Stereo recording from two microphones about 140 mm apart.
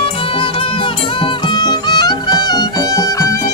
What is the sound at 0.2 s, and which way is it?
Music, 40° left (ahead or behind).